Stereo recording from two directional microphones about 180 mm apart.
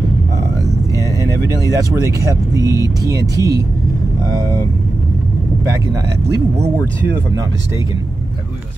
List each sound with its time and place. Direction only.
1.7 s speech: 20° right (ahead or behind)